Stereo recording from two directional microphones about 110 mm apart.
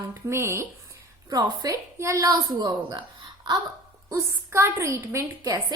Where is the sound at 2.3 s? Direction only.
40° right (ahead or behind).